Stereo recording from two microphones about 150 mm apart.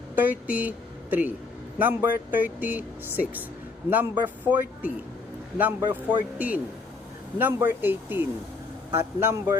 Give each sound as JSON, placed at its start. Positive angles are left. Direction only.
{"t": 0.2, "sound": "speech", "side_deg": -10}
{"t": 1.8, "sound": "speech", "side_deg": -15}